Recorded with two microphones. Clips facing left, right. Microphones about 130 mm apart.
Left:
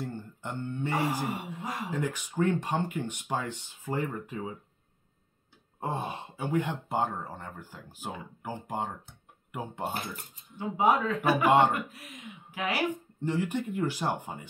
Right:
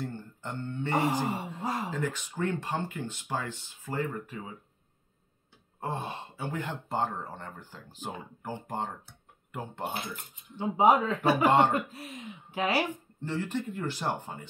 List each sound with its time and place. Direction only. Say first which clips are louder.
0.0 s a sound: even; 10° left (ahead or behind)
0.9 s speech: right 3 dB; 20° right (ahead or behind)
1.9 s speech: left 1 dB; 15° left (ahead or behind)
5.8 s speech: left 1 dB; 15° left (ahead or behind)
10.6 s speech: right 2 dB; 25° right (ahead or behind)
11.4 s speech: left 1 dB; 10° left (ahead or behind)
11.9 s speech: right 4 dB; 30° right (ahead or behind)
12.9 s speech: left 3 dB; 15° left (ahead or behind)